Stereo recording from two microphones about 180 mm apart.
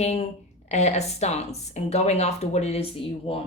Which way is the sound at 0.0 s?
35° left (ahead or behind).